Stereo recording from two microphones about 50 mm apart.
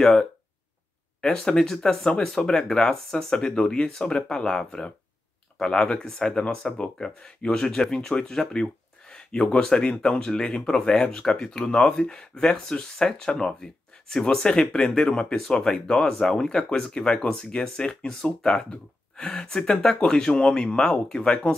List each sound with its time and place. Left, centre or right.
0.0 s speech: centre
9.1 s a sound: centre
9.6 s speech: centre